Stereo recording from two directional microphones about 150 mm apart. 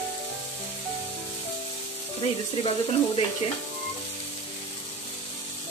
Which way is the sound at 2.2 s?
40° left (ahead or behind).